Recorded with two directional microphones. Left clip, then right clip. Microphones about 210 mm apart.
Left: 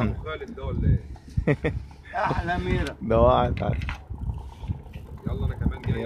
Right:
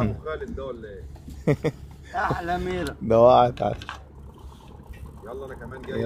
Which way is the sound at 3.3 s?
15° right (ahead or behind).